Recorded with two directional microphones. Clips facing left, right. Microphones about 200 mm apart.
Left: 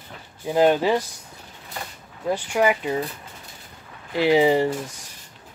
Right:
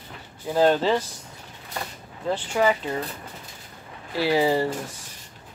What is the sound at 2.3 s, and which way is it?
Speech, 10° left (ahead or behind).